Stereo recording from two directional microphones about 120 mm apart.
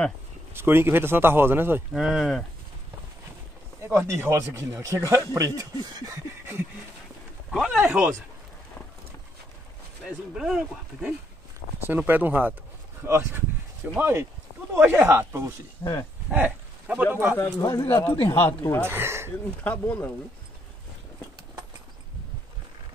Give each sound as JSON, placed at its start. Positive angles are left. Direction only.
{"t": 0.6, "sound": "speech", "side_deg": -20}
{"t": 2.0, "sound": "speech", "side_deg": 0}
{"t": 3.8, "sound": "speech", "side_deg": -20}
{"t": 7.5, "sound": "speech", "side_deg": -5}
{"t": 10.0, "sound": "speech", "side_deg": -5}
{"t": 15.8, "sound": "speech", "side_deg": 20}
{"t": 16.3, "sound": "speech", "side_deg": -15}
{"t": 17.6, "sound": "speech", "side_deg": 30}
{"t": 18.0, "sound": "speech", "side_deg": 40}
{"t": 18.8, "sound": "speech", "side_deg": -20}
{"t": 19.6, "sound": "speech", "side_deg": 15}